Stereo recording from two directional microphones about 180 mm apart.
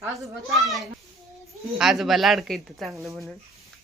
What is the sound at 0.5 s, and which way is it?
Speech, centre (ahead or behind).